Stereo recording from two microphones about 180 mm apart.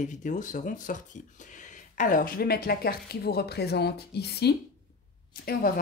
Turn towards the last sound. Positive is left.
turn(degrees=55)  # may be behind; listen again after turning